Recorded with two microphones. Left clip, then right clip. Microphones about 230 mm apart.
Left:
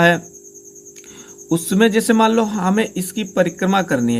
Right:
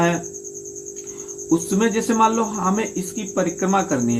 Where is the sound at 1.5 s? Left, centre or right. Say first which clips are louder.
Left 3 dB; left.